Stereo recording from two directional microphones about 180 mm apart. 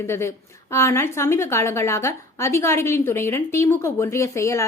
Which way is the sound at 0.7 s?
15° left (ahead or behind).